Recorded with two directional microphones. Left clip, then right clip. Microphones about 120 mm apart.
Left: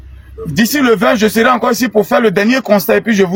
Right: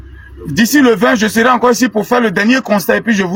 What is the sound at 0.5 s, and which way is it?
Speech, 20° left (ahead or behind).